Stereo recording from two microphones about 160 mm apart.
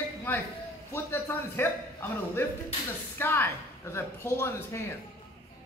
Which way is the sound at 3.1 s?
15° left (ahead or behind).